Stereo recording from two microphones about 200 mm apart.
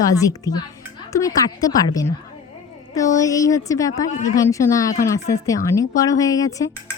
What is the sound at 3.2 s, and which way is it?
Speech, 15° left (ahead or behind).